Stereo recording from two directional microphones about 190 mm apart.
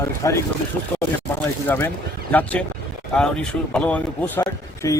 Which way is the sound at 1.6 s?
10° left (ahead or behind).